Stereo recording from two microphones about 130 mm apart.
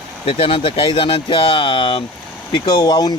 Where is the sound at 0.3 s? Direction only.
45° left (ahead or behind).